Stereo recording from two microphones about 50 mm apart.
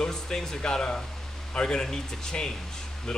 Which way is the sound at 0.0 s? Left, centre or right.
Centre.